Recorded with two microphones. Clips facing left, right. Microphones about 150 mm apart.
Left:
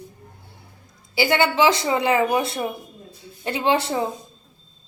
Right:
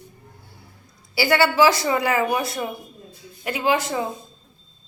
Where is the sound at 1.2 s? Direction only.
20° left (ahead or behind).